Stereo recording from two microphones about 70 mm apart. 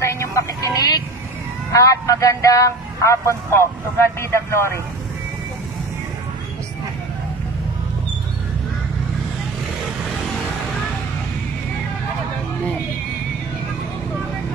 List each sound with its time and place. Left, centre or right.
0.0 s vehicle: left
1.7 s speech: left